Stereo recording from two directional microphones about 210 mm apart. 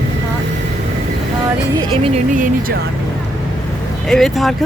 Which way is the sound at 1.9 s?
25° right (ahead or behind).